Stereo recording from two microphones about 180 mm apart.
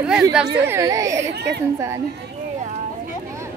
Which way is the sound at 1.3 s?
70° right (ahead or behind).